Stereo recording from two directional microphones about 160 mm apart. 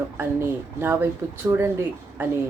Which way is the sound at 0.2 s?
15° right (ahead or behind).